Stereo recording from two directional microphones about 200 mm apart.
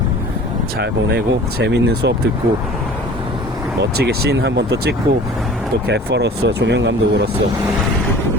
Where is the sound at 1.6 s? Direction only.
55° right (ahead or behind).